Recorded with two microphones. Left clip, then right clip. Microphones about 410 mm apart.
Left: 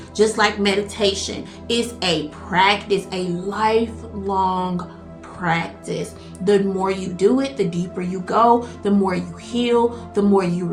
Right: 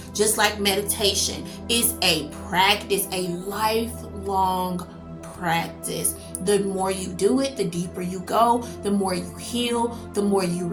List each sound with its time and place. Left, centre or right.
0.2 s speech: right